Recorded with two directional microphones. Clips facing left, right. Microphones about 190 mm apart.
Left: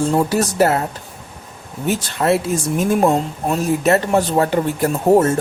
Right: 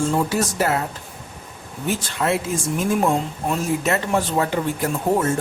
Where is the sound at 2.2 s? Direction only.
40° left (ahead or behind).